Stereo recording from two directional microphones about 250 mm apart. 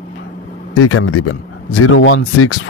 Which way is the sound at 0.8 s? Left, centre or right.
Left.